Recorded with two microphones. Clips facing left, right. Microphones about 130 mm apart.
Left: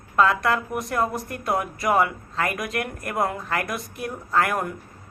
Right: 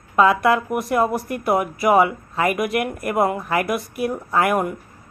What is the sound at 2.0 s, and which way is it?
Speech, 20° right (ahead or behind).